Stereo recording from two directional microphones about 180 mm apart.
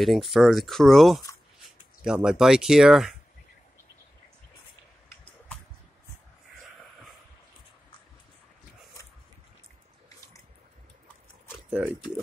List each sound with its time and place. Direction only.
0.0 s speech: centre (ahead or behind)
10.0 s a sound: 20° left (ahead or behind)
11.8 s speech: 5° right (ahead or behind)